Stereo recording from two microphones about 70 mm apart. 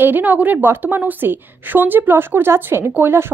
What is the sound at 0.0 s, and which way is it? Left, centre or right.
A woman's voice, right.